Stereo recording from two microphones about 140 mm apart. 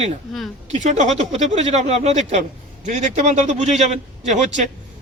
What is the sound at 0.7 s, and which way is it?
Speech, 60° right (ahead or behind).